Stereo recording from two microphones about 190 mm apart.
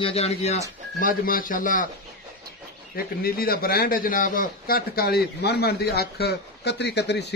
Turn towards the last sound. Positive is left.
turn(degrees=65)  # may be behind; listen again after turning